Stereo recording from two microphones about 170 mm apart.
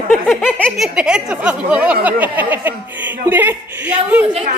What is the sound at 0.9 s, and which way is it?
Speech, 5° right (ahead or behind).